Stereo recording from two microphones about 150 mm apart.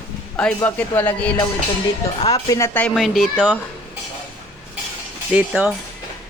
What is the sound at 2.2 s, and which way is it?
Speech, 25° left (ahead or behind).